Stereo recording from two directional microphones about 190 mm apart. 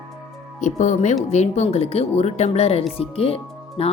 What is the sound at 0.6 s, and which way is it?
Speech, 40° left (ahead or behind).